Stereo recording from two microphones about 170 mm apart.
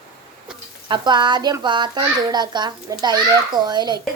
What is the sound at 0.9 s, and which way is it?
A woman's voice, 25° right (ahead or behind).